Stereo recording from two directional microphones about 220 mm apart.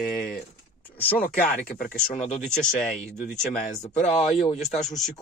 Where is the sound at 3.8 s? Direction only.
20° left (ahead or behind).